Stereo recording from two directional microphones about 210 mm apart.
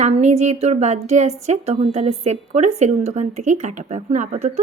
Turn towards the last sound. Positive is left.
turn(degrees=-30)  # may be behind; listen again after turning